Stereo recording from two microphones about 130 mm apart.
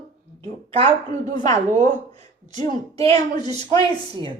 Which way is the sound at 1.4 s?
60° right (ahead or behind).